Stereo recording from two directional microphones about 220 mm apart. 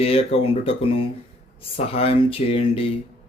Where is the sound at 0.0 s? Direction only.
25° left (ahead or behind).